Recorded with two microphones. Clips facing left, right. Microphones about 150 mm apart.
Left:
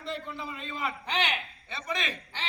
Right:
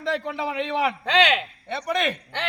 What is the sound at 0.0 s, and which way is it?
A man's voice, 90° right.